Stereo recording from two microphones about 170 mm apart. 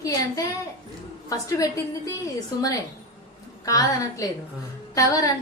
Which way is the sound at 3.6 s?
20° left (ahead or behind).